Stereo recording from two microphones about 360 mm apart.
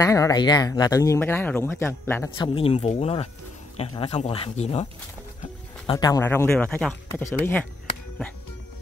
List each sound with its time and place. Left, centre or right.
0.0 s speech: centre
5.9 s speech: centre